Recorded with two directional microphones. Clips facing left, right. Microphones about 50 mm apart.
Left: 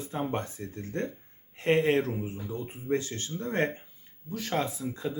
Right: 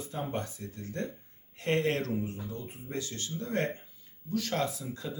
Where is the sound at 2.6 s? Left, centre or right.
Left.